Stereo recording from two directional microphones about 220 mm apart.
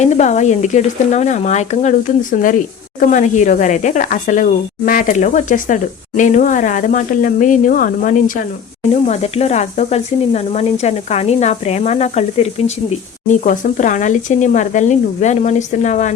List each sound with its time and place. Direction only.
0.0 s speech: 30° left (ahead or behind)